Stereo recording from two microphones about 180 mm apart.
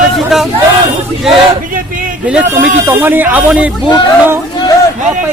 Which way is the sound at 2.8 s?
10° right (ahead or behind).